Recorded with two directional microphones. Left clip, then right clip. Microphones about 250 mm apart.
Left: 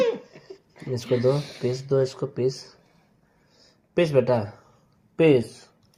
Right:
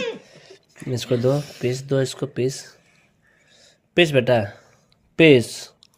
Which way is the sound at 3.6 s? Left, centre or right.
Right.